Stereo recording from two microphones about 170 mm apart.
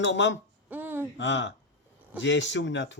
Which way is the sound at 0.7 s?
10° right (ahead or behind).